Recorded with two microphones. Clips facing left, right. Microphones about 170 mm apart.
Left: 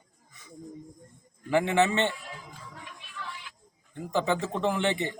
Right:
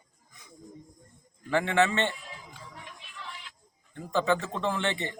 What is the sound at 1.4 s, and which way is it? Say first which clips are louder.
Speech: left 1 dB; 15° left (ahead or behind).